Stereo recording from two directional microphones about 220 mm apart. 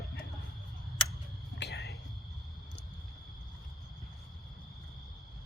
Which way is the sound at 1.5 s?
50° left (ahead or behind).